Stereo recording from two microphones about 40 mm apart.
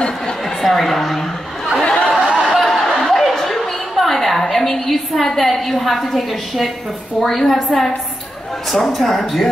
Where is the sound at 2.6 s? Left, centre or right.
Centre.